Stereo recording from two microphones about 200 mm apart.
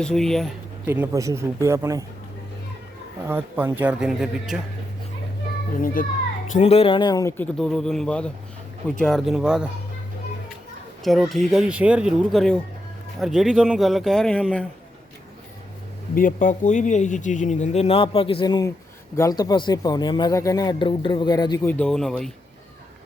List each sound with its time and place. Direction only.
0.0 s speech: 5° left (ahead or behind)
0.9 s speech: 10° right (ahead or behind)
3.2 s speech: 10° right (ahead or behind)
5.8 s a child's voice: 45° left (ahead or behind)
6.5 s speech: 30° left (ahead or behind); by 9.6 s 5° right (ahead or behind)
11.0 s speech: centre (ahead or behind)
16.1 s a man's voice: 40° left (ahead or behind); by 21.7 s 20° left (ahead or behind)
21.7 s speech: 5° left (ahead or behind)